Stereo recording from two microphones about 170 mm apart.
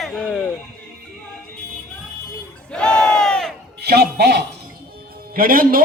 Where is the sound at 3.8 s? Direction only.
70° right (ahead or behind).